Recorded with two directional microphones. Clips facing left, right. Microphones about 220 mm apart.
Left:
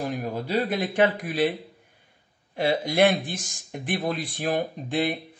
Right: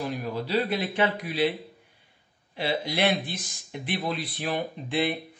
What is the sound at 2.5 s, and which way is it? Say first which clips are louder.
A man's voice: left 5 dB; 45° left (ahead or behind).